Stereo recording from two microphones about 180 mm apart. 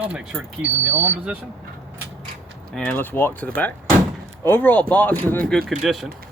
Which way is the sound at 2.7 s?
10° left (ahead or behind).